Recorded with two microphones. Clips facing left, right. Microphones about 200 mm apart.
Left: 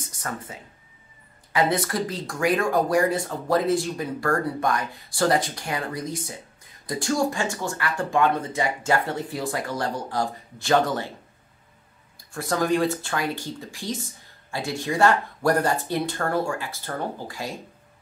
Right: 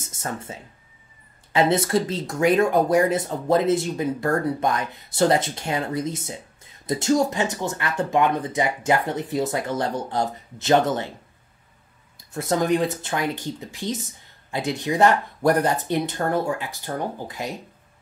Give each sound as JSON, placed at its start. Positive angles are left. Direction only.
{"t": 0.0, "sound": "speech", "side_deg": -25}
{"t": 12.2, "sound": "speech", "side_deg": -20}